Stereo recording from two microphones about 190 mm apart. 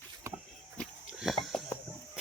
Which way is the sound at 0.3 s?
15° right (ahead or behind).